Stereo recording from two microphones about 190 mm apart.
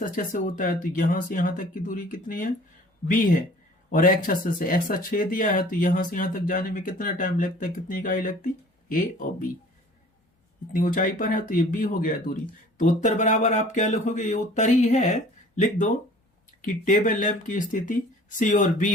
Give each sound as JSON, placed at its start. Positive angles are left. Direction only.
{"t": 0.0, "sound": "speech", "side_deg": 45}
{"t": 3.8, "sound": "speech", "side_deg": 45}
{"t": 10.7, "sound": "speech", "side_deg": 45}